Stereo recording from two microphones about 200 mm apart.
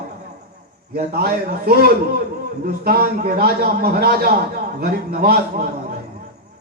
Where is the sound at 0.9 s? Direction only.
50° right (ahead or behind).